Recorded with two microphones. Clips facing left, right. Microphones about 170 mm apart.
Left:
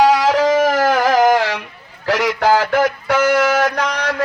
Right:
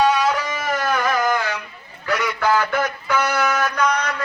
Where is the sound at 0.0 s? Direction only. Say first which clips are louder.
Left 6 dB; 90° left.